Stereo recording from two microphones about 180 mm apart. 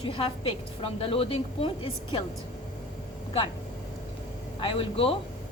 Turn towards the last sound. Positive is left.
turn(degrees=30)  # may be behind; listen again after turning